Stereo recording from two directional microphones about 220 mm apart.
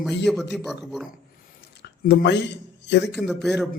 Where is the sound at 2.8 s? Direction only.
50° left (ahead or behind).